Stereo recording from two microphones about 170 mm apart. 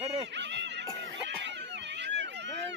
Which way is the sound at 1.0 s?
90° right.